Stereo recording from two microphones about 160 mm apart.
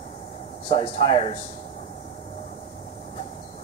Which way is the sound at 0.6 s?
35° left (ahead or behind).